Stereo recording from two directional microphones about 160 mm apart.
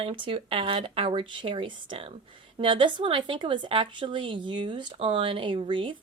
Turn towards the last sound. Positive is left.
turn(degrees=-30)  # may be behind; listen again after turning